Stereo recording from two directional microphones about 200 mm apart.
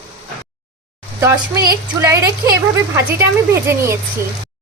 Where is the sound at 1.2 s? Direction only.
15° right (ahead or behind).